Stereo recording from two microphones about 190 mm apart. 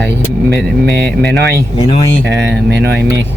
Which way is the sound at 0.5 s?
60° right (ahead or behind).